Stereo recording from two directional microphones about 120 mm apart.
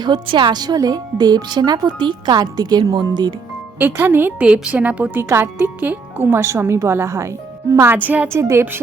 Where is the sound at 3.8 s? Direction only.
15° right (ahead or behind).